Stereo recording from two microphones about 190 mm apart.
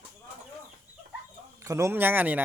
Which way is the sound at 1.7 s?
15° right (ahead or behind).